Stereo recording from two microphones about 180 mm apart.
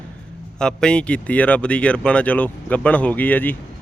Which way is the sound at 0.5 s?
5° left (ahead or behind).